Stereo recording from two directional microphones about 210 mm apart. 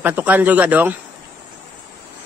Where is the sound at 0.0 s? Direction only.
10° right (ahead or behind).